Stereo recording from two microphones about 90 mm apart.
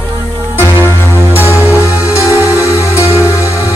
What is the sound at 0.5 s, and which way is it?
Music, 25° left (ahead or behind).